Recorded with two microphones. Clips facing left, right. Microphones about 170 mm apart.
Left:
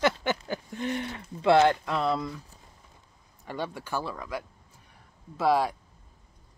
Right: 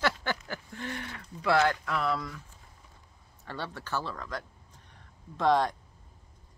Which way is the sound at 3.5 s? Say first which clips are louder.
Left 3 dB; 15° left (ahead or behind).